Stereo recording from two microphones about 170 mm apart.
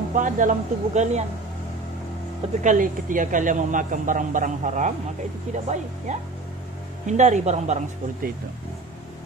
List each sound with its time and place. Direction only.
0.1 s speech: 50° right (ahead or behind)
2.6 s speech: 50° right (ahead or behind)